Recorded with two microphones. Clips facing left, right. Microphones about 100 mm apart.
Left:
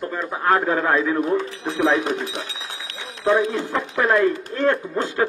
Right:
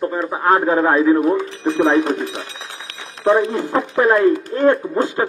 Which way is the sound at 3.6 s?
30° right (ahead or behind).